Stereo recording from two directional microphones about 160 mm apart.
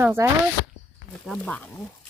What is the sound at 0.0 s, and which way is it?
Speech, 15° right (ahead or behind).